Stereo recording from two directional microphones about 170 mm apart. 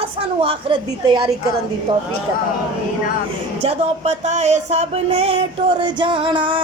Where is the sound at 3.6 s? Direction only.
40° right (ahead or behind).